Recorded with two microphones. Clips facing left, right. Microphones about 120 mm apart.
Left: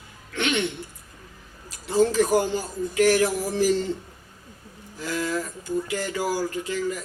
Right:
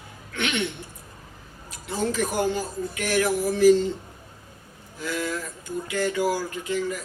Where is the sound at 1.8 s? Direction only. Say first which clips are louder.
Left 6 dB; 35° left (ahead or behind).